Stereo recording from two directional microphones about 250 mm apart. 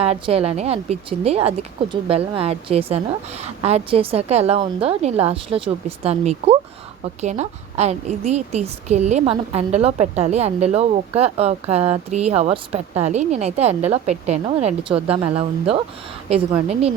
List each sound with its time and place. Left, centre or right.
0.0 s a woman's voice: right